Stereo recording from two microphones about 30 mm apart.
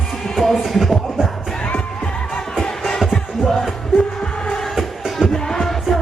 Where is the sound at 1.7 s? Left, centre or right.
Left.